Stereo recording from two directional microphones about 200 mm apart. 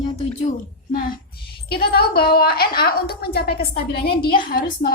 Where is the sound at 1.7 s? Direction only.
50° left (ahead or behind).